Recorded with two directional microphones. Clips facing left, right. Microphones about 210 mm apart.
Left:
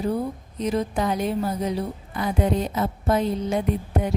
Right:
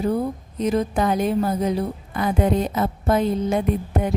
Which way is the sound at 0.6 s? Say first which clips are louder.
Right 3 dB; 50° right (ahead or behind).